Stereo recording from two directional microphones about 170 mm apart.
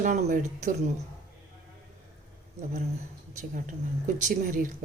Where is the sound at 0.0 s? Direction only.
45° right (ahead or behind).